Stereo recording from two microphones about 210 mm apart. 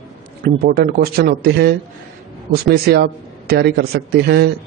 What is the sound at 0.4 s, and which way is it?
A man's voice, 45° right (ahead or behind).